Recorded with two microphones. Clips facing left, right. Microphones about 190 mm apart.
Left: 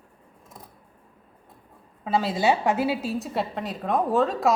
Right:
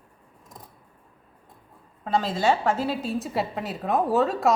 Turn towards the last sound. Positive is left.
turn(degrees=0)  # may be behind; listen again after turning